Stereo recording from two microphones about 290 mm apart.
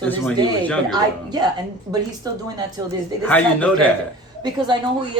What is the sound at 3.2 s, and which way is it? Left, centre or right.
Speech, centre.